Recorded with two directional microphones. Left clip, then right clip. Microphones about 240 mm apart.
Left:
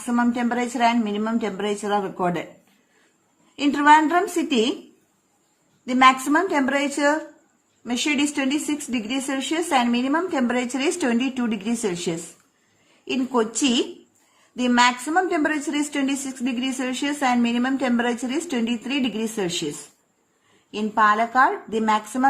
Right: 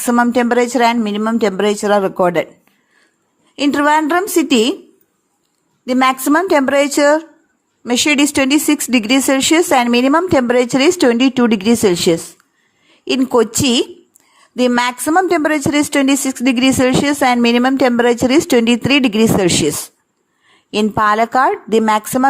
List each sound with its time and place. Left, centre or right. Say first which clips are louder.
0.0 s a woman's voice: right 10 dB; right
3.5 s a woman's voice: right 3 dB; right
5.8 s a woman's voice: right 2 dB; right
20.7 s a woman's voice: right 5 dB; right